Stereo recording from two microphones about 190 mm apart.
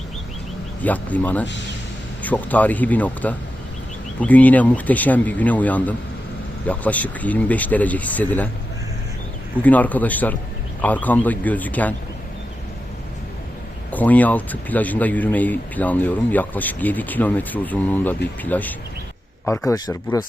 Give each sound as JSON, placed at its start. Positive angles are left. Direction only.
{"t": 0.8, "sound": "speech", "side_deg": 10}
{"t": 9.6, "sound": "speech", "side_deg": 10}
{"t": 13.9, "sound": "speech", "side_deg": 10}